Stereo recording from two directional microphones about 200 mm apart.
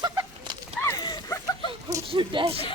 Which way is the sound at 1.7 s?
15° right (ahead or behind).